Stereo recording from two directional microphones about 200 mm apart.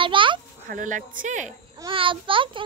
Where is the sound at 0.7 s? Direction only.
40° right (ahead or behind).